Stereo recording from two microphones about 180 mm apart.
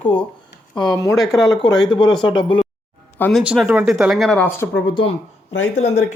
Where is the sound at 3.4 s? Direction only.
5° right (ahead or behind); by 4.7 s 10° left (ahead or behind).